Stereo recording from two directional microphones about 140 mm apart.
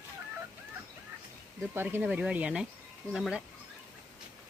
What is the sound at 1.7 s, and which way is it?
Speech, 15° right (ahead or behind).